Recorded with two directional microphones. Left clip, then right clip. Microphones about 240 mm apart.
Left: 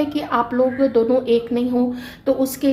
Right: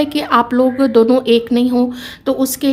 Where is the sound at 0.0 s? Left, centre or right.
Right.